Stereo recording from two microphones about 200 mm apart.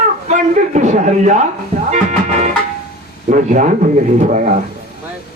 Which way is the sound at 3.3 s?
40° right (ahead or behind).